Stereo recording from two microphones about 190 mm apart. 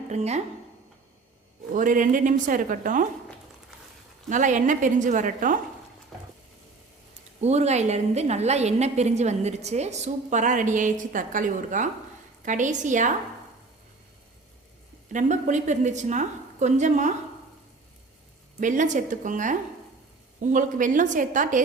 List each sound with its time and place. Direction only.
0.1 s a woman's voice: 35° right (ahead or behind)
1.7 s a woman's voice: 45° right (ahead or behind)
4.3 s a woman's voice: 40° right (ahead or behind)
7.4 s a woman's voice: 35° right (ahead or behind)
15.1 s a woman's voice: 40° right (ahead or behind)
18.6 s a woman's voice: 40° right (ahead or behind)